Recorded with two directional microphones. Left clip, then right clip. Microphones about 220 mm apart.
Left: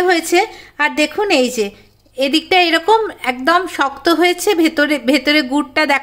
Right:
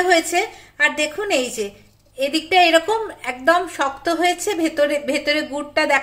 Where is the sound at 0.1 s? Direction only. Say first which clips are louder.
Left 3 dB; 45° left (ahead or behind).